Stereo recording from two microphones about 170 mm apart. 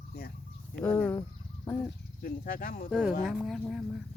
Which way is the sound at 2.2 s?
55° left (ahead or behind).